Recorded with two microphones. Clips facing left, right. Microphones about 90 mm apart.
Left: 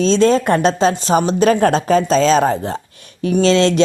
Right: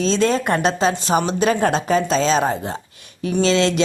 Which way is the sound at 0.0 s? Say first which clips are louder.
Left 5 dB; 35° left (ahead or behind).